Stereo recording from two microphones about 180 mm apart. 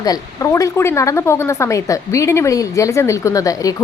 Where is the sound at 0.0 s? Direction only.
20° left (ahead or behind).